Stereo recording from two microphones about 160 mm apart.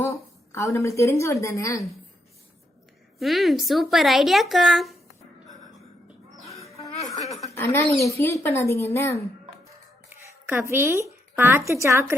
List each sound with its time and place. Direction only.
0.0 s a woman's voice: 20° left (ahead or behind)
3.2 s speech: centre (ahead or behind)
6.7 s music: 20° left (ahead or behind)
7.5 s a woman's voice: 15° left (ahead or behind)
10.1 s a woman's voice: 15° right (ahead or behind)